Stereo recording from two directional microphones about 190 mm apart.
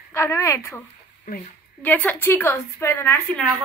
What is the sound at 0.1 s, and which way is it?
A woman's voice, 15° left (ahead or behind).